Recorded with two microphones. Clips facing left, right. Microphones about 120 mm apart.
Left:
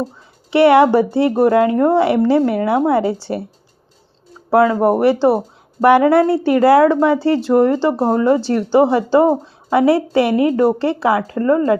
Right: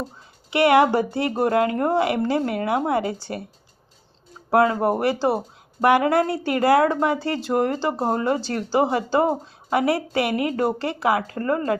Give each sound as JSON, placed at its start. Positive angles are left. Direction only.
{"t": 0.5, "sound": "a woman's voice", "side_deg": 30}
{"t": 4.7, "sound": "a woman's voice", "side_deg": 25}